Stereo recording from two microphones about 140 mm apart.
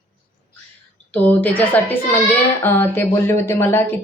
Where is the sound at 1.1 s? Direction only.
10° left (ahead or behind).